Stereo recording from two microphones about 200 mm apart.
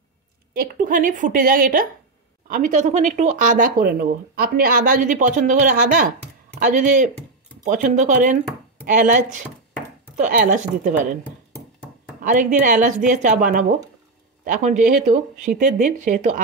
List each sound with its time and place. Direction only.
0.6 s a woman's voice: 45° right (ahead or behind)
12.2 s speech: 40° right (ahead or behind)